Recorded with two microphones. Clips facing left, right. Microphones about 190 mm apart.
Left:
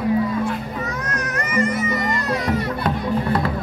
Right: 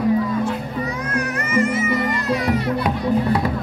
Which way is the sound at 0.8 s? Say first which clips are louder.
Right 3 dB; 10° right (ahead or behind).